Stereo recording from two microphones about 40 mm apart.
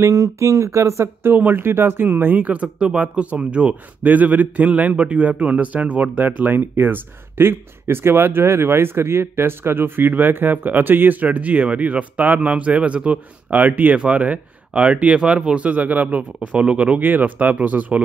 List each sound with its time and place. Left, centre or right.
1.3 s speech: right
2.0 s a man's voice: right
4.0 s a man's voice: right
6.3 s a man's voice: right
13.5 s speech: right
13.9 s speech: right
15.1 s speech: right
15.7 s a man's voice: right
16.3 s a man's voice: right
17.0 s a man's voice: right